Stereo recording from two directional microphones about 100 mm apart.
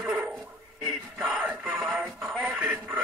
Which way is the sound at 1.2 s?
10° right (ahead or behind).